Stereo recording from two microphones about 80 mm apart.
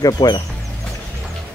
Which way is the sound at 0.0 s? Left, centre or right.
Left.